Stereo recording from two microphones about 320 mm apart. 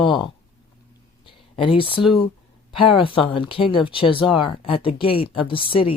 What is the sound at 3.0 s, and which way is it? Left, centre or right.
Speech, centre.